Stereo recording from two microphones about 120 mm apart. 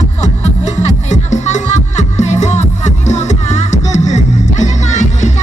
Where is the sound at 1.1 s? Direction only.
80° left.